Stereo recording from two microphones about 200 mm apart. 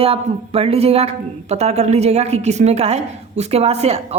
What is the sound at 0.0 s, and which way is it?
Speech, 30° right (ahead or behind).